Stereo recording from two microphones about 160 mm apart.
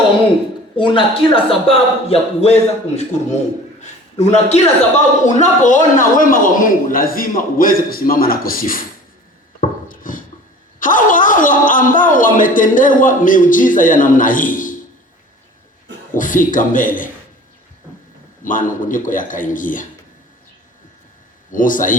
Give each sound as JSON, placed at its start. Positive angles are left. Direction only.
{"t": 0.8, "sound": "a man's voice", "side_deg": 30}
{"t": 9.6, "sound": "a sound", "side_deg": 60}
{"t": 10.8, "sound": "speech", "side_deg": 55}
{"t": 16.1, "sound": "speech", "side_deg": 55}
{"t": 18.4, "sound": "speech", "side_deg": 55}
{"t": 21.5, "sound": "speech", "side_deg": 55}